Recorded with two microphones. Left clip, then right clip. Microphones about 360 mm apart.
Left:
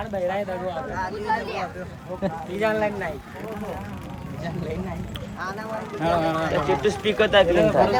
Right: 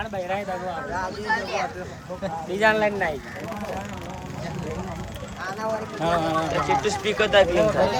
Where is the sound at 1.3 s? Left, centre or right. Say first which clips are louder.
Right 2 dB; centre.